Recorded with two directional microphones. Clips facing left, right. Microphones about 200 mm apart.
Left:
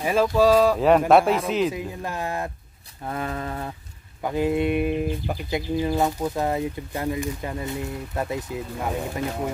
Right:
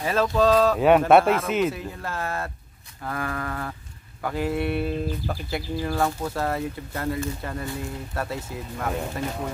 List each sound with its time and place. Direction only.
0.0 s speech: 10° left (ahead or behind)
0.7 s speech: centre (ahead or behind)
1.7 s speech: 15° left (ahead or behind)
3.1 s a sound: 20° left (ahead or behind)
4.2 s speech: 20° left (ahead or behind)